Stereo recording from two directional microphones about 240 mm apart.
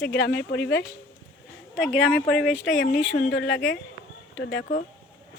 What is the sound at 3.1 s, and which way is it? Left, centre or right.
Speech, left.